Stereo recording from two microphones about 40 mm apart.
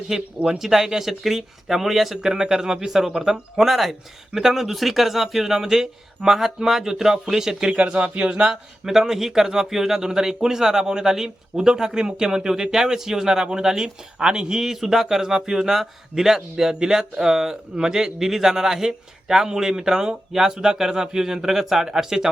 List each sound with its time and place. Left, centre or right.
0.1 s a man's voice: centre
2.3 s a man's voice: centre
7.8 s speech: right
8.4 s a man's voice: centre